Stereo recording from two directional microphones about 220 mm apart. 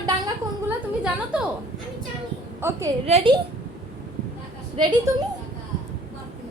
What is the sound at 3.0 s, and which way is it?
Speech, 30° right (ahead or behind).